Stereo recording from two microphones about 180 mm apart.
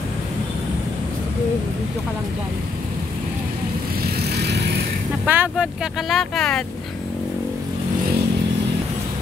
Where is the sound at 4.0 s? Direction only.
65° right (ahead or behind).